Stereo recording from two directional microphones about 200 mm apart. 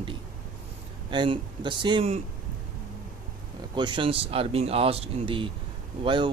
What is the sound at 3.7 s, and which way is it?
Speech, 25° right (ahead or behind).